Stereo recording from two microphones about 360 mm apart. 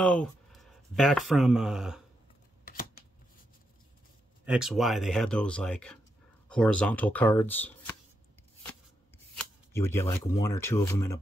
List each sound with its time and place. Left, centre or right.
0.0 s speech: centre
2.6 s shuffling cards: left
4.5 s speech: centre
9.7 s speech: centre